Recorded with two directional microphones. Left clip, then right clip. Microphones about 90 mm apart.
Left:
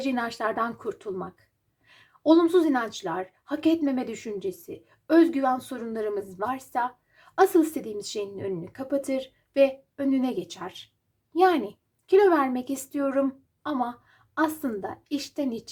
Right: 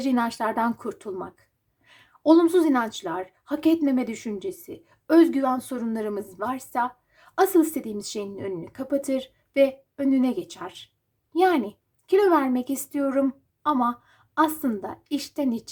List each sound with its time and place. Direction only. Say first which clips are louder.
0.0 s a woman's voice: right 3 dB; 35° right (ahead or behind)
3.0 s a woman's voice: even; 30° right (ahead or behind)
6.4 s a woman's voice: right 2 dB; 20° right (ahead or behind)
8.4 s a woman's voice: even; 20° right (ahead or behind)
8.9 s speech: right 2 dB; 30° right (ahead or behind)
10.2 s a woman's voice: right 2 dB; 20° right (ahead or behind)